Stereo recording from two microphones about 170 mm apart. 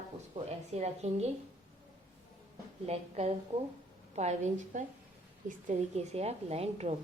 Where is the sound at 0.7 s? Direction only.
40° right (ahead or behind).